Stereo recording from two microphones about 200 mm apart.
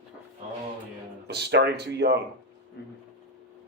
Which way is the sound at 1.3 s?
55° right (ahead or behind).